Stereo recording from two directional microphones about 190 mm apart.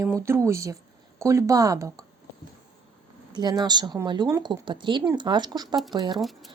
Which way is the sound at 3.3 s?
20° right (ahead or behind).